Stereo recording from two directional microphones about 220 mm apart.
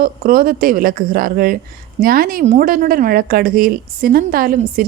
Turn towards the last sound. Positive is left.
turn(degrees=-40)  # may be behind; listen again after turning